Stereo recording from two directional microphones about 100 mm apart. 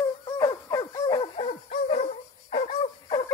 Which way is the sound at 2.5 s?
90° left.